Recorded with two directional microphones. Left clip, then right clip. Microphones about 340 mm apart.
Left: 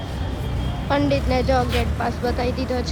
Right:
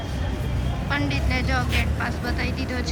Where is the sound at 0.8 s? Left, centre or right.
Centre.